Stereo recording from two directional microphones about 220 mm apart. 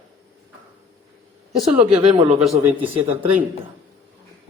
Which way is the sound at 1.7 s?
25° right (ahead or behind).